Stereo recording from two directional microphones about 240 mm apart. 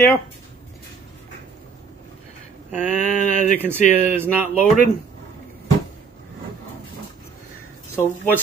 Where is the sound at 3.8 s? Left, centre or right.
Left.